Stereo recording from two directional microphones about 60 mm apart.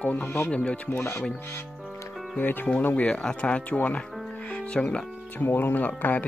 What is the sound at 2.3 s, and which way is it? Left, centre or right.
Speech, left.